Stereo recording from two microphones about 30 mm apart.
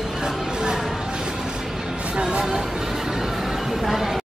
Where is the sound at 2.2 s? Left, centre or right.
Right.